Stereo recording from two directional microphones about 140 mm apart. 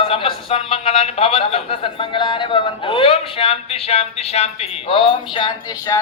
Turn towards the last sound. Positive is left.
turn(degrees=30)  # may be behind; listen again after turning